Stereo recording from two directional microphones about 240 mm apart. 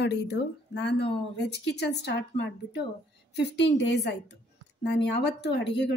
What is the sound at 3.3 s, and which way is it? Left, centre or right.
Speech, left.